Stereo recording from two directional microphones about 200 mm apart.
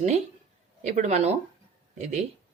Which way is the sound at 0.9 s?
35° right (ahead or behind).